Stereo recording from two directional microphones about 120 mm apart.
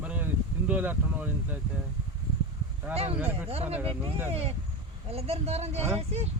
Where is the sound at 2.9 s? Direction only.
60° right (ahead or behind).